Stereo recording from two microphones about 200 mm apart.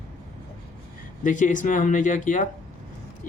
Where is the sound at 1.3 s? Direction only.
40° left (ahead or behind).